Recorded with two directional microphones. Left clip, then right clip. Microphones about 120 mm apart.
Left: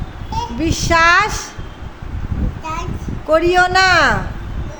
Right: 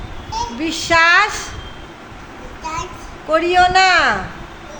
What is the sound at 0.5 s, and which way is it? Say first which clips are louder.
Speech: even; 40° left (ahead or behind).